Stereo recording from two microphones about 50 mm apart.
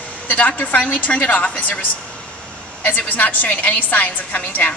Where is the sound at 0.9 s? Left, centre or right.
Left.